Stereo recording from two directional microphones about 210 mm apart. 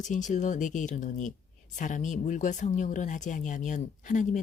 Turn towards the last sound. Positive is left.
turn(degrees=35)  # may be behind; listen again after turning